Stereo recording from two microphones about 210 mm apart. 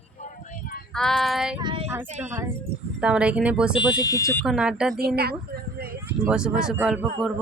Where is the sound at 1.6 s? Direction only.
25° right (ahead or behind).